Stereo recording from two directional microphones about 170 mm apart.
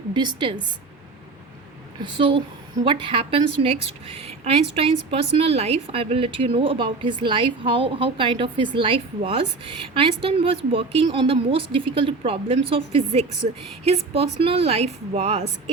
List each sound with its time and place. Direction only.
0.1 s a woman's voice: 25° right (ahead or behind)
2.0 s a woman's voice: 30° right (ahead or behind)